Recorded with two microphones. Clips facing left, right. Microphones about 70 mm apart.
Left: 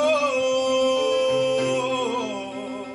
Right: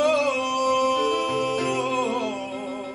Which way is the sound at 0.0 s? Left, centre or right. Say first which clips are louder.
Left 1 dB; right.